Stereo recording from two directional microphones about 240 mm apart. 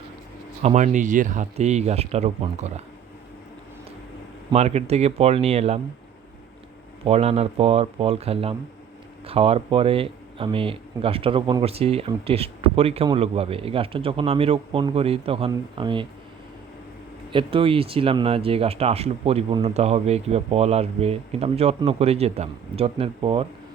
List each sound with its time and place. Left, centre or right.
0.6 s speech: right
4.5 s speech: right
7.0 s speech: right
17.3 s speech: right